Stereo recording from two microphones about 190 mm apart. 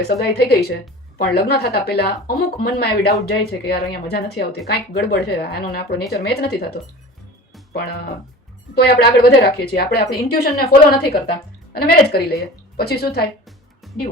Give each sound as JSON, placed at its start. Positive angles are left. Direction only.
{"t": 0.0, "sound": "speech", "side_deg": 55}
{"t": 8.7, "sound": "speech", "side_deg": 55}
{"t": 13.8, "sound": "music", "side_deg": 0}